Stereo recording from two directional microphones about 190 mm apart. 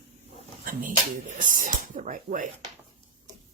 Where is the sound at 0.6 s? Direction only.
45° right (ahead or behind).